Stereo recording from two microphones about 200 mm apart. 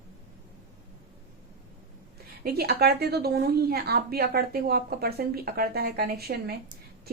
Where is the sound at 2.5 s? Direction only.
50° right (ahead or behind).